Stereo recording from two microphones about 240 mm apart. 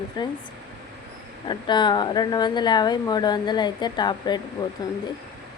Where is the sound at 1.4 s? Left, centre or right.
Centre.